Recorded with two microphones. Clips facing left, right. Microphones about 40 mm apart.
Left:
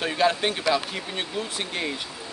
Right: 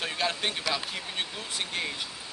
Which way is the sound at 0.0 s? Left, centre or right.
Centre.